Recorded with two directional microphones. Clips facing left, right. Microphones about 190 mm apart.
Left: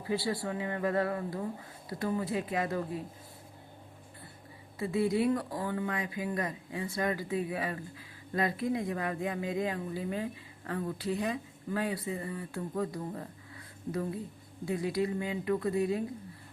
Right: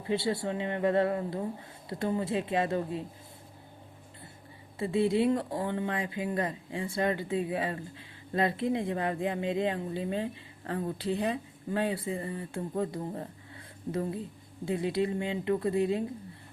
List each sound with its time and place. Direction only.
0.0 s speech: 25° right (ahead or behind)
4.8 s speech: 25° right (ahead or behind)